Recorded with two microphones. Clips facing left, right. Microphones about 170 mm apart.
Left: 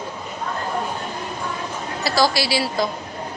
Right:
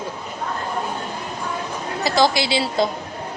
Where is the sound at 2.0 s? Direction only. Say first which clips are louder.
Right 1 dB; 20° right (ahead or behind).